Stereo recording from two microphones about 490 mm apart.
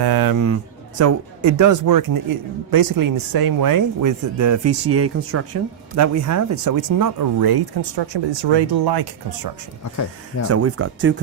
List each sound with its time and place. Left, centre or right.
0.0 s speech: right
10.5 s speech: right